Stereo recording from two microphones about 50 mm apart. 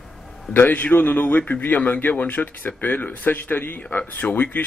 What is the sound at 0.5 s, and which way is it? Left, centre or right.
Speech, left.